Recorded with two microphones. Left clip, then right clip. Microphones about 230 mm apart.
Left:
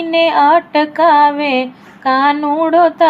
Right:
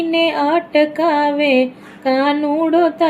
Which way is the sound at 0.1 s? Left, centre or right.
Left.